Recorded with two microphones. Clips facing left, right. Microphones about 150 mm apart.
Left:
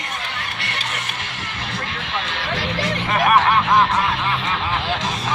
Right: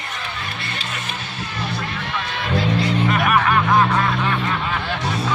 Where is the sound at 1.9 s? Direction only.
90° left.